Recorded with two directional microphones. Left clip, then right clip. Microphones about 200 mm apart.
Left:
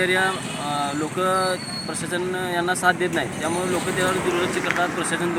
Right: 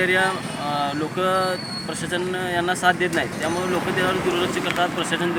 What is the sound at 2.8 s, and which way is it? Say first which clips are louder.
Speech: right 1 dB; 10° right (ahead or behind).